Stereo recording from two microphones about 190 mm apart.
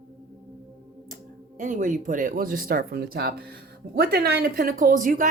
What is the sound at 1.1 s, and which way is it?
Speech, 40° right (ahead or behind).